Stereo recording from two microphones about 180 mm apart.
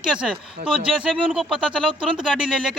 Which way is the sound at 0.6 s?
45° right (ahead or behind).